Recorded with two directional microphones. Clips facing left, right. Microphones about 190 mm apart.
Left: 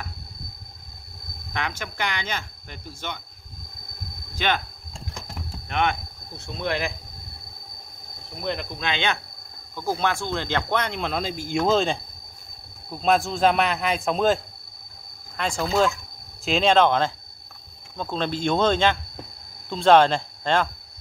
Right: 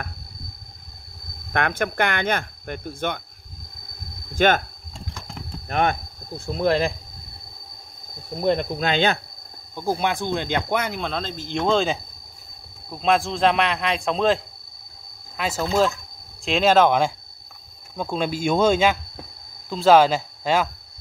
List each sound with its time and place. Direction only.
1.5 s speech: 55° right (ahead or behind)
4.4 s speech: 45° right (ahead or behind)
4.9 s a sound: centre (ahead or behind)
5.7 s cricket: 40° right (ahead or behind)
8.4 s speech: 35° right (ahead or behind)
9.8 s speech: 15° right (ahead or behind)